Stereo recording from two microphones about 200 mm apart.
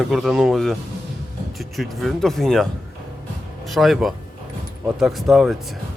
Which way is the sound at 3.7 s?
Centre (ahead or behind).